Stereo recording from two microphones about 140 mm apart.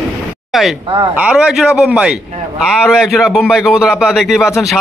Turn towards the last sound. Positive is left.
turn(degrees=0)  # may be behind; listen again after turning